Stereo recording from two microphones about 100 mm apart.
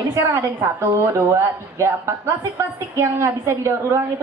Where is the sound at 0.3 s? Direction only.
25° right (ahead or behind).